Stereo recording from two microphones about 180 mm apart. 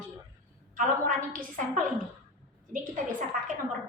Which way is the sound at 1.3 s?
45° right (ahead or behind).